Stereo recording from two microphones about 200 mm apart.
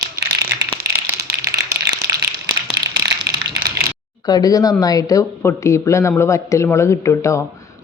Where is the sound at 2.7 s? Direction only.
55° right (ahead or behind).